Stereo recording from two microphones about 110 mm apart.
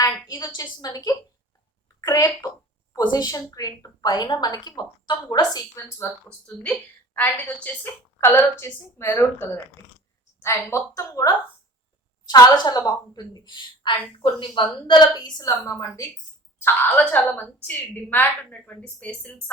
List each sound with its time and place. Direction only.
0.0 s a woman's voice: 35° left (ahead or behind)
2.0 s a woman's voice: 35° left (ahead or behind)
6.4 s a woman's voice: 10° left (ahead or behind); by 16.0 s 30° left (ahead or behind)
16.6 s a woman's voice: 15° left (ahead or behind)